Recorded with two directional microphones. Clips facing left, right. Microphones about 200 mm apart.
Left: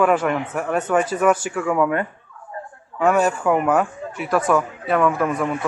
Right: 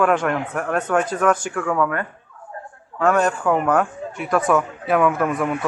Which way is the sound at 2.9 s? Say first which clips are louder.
Left 1 dB; 10° left (ahead or behind).